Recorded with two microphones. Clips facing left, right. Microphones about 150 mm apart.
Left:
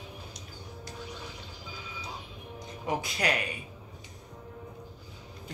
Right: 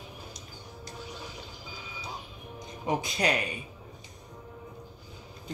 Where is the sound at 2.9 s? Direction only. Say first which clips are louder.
Right 2 dB; 20° right (ahead or behind).